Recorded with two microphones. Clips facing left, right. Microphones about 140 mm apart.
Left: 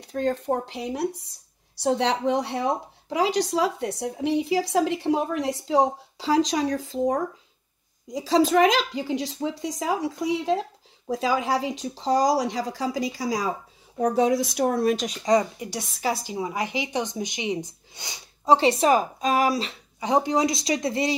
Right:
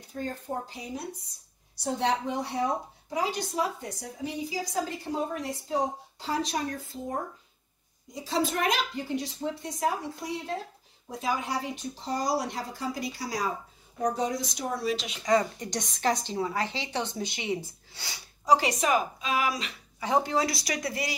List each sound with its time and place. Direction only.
0.0 s speech: 80° left
14.7 s speech: 50° left (ahead or behind)
15.2 s a woman's voice: 15° left (ahead or behind); by 19.8 s 35° left (ahead or behind)
20.0 s speech: 20° left (ahead or behind)